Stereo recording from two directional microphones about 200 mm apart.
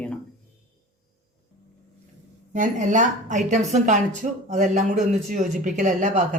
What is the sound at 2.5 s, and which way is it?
Speech, 40° right (ahead or behind).